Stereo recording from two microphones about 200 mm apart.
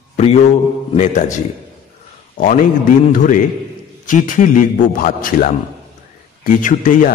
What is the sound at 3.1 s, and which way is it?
A man's voice, 40° left (ahead or behind).